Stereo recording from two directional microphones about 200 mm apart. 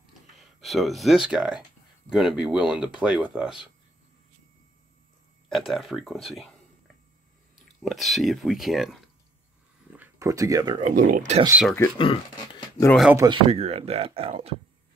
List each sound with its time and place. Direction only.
0.0 s a sound: centre (ahead or behind)
2.0 s speech: 5° right (ahead or behind)
5.5 s speech: centre (ahead or behind)
7.5 s speech: centre (ahead or behind)
9.9 s speech: 15° right (ahead or behind)
10.8 s speech: 40° right (ahead or behind)
12.0 s speech: 25° left (ahead or behind)
13.1 s speech: 15° right (ahead or behind)
13.5 s speech: 30° right (ahead or behind)